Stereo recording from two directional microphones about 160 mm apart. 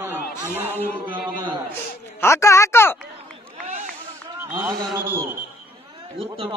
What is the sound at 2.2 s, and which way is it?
Speech, 15° left (ahead or behind).